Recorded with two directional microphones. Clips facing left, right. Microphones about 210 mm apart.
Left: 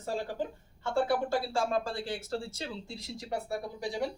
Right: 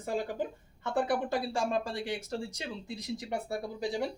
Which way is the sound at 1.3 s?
15° right (ahead or behind).